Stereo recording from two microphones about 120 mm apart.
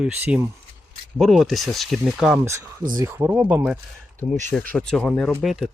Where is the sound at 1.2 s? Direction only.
Centre (ahead or behind).